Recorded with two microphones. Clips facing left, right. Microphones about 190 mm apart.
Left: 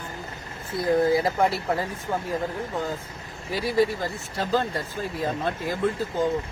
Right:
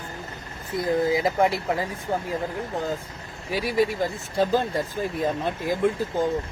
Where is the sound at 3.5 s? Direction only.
15° right (ahead or behind).